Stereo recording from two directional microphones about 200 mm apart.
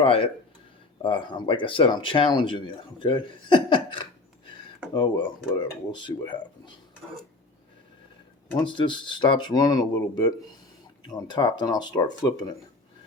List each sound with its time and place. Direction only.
0.0 s speech: 30° left (ahead or behind)
8.5 s speech: 25° left (ahead or behind)